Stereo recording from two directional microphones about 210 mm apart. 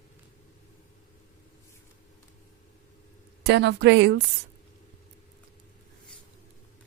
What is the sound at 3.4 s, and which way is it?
Speech, 55° right (ahead or behind).